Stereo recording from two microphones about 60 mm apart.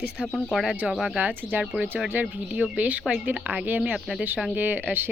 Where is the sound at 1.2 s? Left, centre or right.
Right.